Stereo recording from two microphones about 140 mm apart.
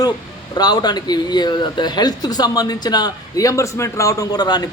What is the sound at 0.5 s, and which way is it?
Speech, 30° left (ahead or behind).